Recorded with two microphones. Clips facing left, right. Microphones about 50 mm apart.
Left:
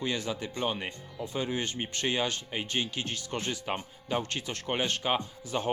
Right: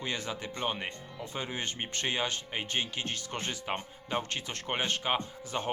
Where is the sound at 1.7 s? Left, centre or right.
Right.